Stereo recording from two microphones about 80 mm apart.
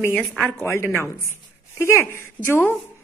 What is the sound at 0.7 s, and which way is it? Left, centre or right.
A woman's voice, left.